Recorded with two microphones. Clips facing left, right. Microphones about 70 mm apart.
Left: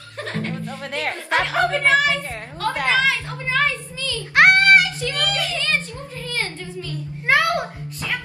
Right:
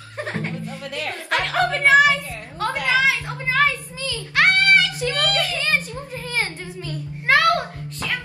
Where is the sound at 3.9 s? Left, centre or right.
Right.